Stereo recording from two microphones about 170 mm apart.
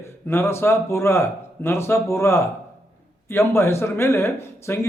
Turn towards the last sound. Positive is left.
turn(degrees=15)  # may be behind; listen again after turning